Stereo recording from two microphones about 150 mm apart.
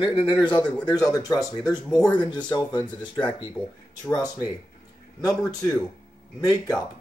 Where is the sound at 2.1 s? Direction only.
30° left (ahead or behind).